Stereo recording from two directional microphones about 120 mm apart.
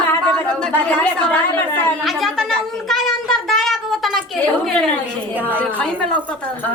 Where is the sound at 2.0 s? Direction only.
Centre (ahead or behind).